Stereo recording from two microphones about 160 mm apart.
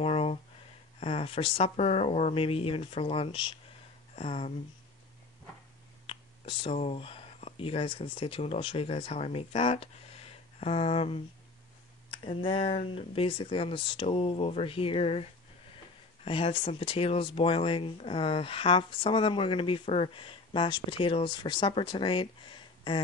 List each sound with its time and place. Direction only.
0.0 s a sound: 35° left (ahead or behind)
0.9 s speech: 40° left (ahead or behind)
6.0 s speech: 30° left (ahead or behind)
16.3 s speech: 35° left (ahead or behind)